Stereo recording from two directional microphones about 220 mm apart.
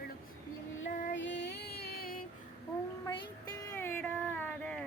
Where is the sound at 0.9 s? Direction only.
35° left (ahead or behind).